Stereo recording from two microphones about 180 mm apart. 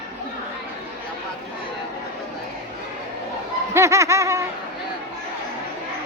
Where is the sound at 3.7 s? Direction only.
15° right (ahead or behind).